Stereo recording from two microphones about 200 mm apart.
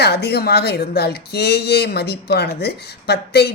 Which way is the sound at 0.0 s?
55° left (ahead or behind).